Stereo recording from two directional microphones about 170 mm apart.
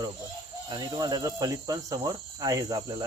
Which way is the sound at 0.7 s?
25° right (ahead or behind).